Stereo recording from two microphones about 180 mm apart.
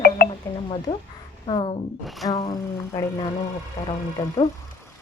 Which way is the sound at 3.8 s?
15° left (ahead or behind).